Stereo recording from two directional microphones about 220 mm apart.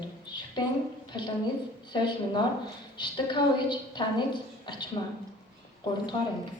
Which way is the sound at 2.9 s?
20° left (ahead or behind).